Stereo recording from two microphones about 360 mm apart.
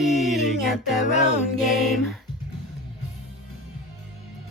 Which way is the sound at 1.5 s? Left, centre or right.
Centre.